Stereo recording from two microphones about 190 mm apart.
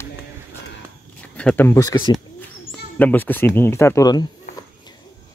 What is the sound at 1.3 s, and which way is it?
Speech, 10° left (ahead or behind).